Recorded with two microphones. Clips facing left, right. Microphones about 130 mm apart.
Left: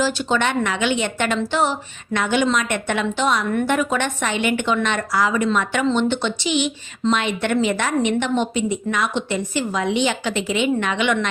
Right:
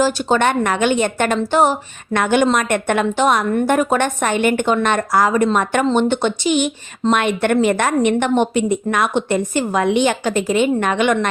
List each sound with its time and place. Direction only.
0.0 s a woman's voice: 45° right (ahead or behind)